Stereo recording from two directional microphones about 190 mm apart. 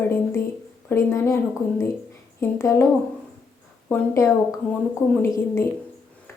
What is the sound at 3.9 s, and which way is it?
Speech, 10° left (ahead or behind).